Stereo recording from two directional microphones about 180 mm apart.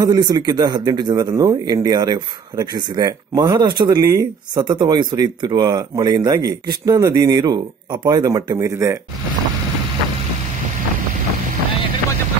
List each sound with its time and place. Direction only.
0.0 s speech: 20° right (ahead or behind)